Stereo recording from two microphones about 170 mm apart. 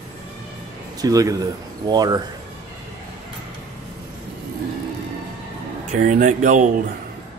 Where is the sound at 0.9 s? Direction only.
20° right (ahead or behind).